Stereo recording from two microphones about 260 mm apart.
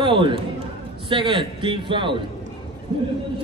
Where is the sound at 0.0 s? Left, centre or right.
Centre.